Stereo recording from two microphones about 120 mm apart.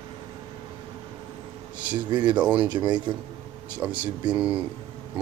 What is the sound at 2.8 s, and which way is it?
Speech, 40° right (ahead or behind).